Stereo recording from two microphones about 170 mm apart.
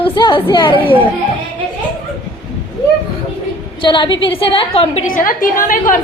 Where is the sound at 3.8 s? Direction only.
30° left (ahead or behind).